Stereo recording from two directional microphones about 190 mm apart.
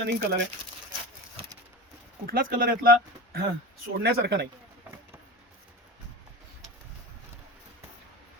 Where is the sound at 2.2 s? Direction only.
50° right (ahead or behind).